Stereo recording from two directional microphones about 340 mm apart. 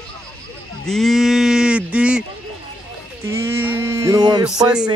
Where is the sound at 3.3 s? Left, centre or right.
Centre.